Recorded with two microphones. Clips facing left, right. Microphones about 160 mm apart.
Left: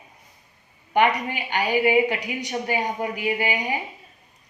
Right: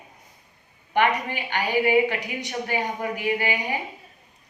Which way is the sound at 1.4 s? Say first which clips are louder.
Left 1 dB; 15° left (ahead or behind).